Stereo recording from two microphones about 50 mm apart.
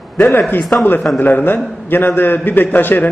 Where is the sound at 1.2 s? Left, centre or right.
Left.